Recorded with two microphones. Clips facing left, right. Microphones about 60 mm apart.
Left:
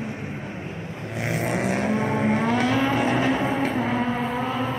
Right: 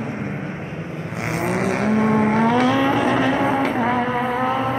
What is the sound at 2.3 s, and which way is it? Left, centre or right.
Vehicle, right.